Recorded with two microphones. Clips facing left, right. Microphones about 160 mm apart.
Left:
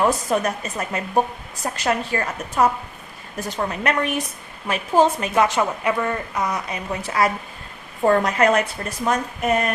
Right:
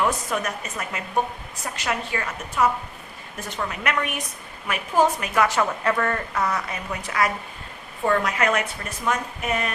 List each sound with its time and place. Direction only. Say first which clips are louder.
0.0 s a woman's voice: left 5 dB; 35° left (ahead or behind); by 6.8 s 15° left (ahead or behind)
8.0 s speech: left 5 dB; 35° left (ahead or behind)